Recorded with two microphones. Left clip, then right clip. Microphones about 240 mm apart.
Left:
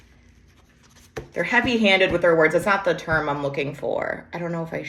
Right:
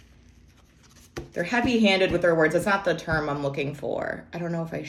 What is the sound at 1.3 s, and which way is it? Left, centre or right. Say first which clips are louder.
Speech: left 4 dB; centre.